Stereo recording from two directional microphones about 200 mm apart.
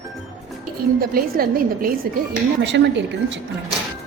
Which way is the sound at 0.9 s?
50° right (ahead or behind).